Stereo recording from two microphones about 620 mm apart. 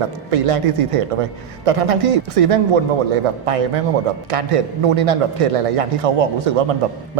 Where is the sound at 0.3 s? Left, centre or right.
Right.